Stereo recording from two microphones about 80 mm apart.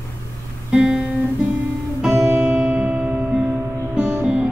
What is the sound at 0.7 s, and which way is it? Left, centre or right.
Guitar, centre.